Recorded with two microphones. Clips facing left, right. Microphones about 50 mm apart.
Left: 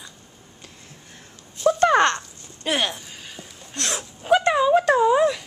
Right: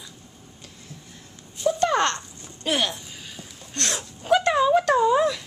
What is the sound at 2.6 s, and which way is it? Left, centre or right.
Speech, centre.